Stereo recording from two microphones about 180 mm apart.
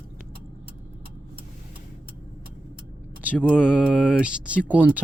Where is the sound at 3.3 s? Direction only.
10° left (ahead or behind).